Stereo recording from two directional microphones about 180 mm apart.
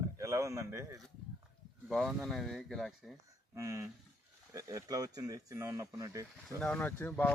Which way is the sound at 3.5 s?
15° right (ahead or behind).